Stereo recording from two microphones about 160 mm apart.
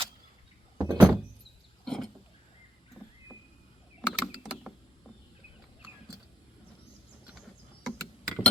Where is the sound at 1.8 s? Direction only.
Centre (ahead or behind).